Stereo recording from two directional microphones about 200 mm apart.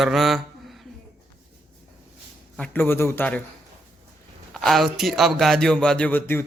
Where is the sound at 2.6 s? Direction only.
10° left (ahead or behind).